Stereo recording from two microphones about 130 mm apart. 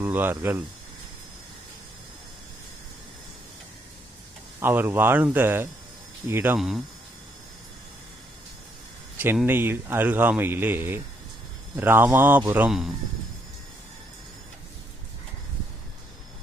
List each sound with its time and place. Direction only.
0.0 s speech: 15° right (ahead or behind)
4.6 s speech: 15° right (ahead or behind)
6.6 s speech: centre (ahead or behind)
9.1 s speech: 15° right (ahead or behind)